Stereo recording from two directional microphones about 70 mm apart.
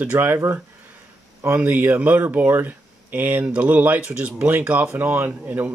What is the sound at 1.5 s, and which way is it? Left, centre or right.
Speech, right.